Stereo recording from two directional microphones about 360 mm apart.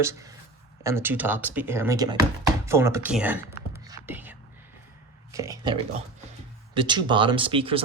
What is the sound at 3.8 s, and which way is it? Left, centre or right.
Whispering, centre.